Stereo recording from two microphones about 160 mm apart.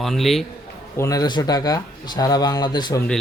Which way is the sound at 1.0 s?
25° left (ahead or behind).